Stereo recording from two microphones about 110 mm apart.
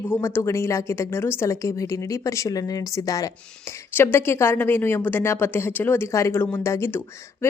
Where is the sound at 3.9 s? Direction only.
20° left (ahead or behind).